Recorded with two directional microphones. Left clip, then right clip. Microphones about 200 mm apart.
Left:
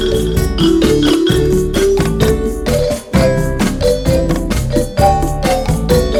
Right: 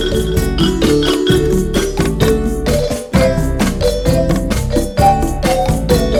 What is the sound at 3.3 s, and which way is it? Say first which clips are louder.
Music: left 1 dB; 25° left (ahead or behind).